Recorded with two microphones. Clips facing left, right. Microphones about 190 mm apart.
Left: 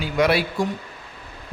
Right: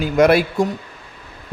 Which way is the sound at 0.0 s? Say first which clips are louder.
Right 6 dB; 45° right (ahead or behind).